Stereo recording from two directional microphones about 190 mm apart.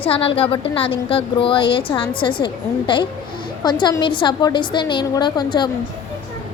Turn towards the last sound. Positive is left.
turn(degrees=25)  # may be behind; listen again after turning